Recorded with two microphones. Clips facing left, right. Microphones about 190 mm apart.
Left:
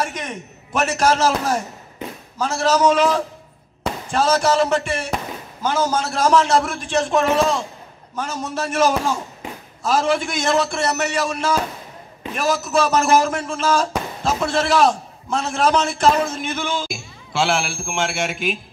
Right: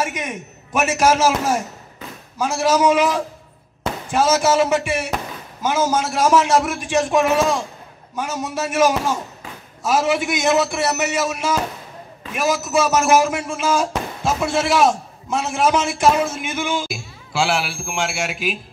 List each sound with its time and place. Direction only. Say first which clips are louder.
0.0 s a man's voice: right 1 dB; 5° right (ahead or behind)